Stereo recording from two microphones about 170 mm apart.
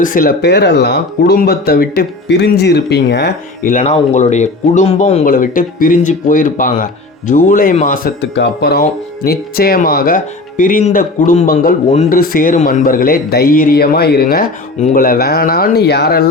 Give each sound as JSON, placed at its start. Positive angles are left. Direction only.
{"t": 0.0, "sound": "speech", "side_deg": 55}
{"t": 3.6, "sound": "speech", "side_deg": 50}
{"t": 8.2, "sound": "speech", "side_deg": 80}